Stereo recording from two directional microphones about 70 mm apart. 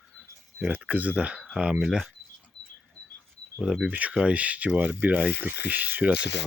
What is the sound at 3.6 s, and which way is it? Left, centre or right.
Speech, centre.